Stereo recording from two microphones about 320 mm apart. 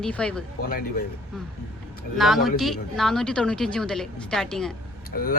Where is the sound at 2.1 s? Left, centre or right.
Centre.